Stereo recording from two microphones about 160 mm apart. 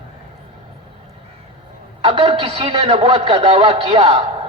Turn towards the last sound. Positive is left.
turn(degrees=-40)  # may be behind; listen again after turning